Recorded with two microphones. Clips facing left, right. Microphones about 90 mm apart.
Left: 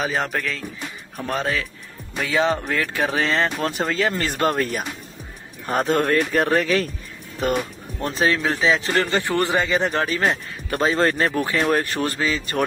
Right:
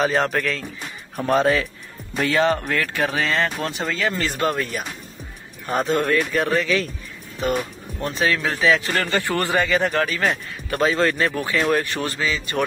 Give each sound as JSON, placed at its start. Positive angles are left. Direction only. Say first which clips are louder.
{"t": 0.0, "sound": "speech", "louder": "right 4 dB", "side_deg": 5}
{"t": 2.3, "sound": "a man's voice", "louder": "even", "side_deg": 15}
{"t": 5.9, "sound": "speech", "louder": "left 1 dB", "side_deg": 45}
{"t": 8.0, "sound": "speech", "louder": "left 1 dB", "side_deg": 35}
{"t": 8.4, "sound": "a man's voice", "louder": "right 1 dB", "side_deg": 25}